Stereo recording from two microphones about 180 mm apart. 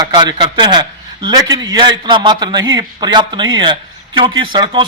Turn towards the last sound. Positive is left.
turn(degrees=-25)  # may be behind; listen again after turning